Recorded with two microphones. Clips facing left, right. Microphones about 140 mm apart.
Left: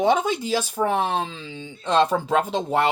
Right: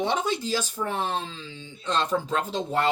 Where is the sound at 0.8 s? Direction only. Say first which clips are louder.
Left 6 dB; 80° left.